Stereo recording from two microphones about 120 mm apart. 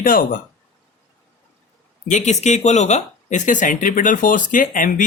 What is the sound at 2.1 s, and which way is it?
Speech, 80° left.